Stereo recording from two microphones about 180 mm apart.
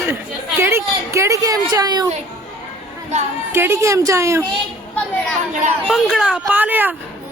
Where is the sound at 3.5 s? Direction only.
15° right (ahead or behind).